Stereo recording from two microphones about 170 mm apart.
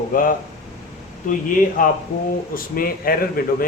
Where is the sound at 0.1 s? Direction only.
55° left (ahead or behind).